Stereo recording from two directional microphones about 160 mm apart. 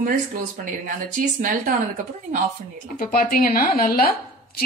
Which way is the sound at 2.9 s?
65° left (ahead or behind).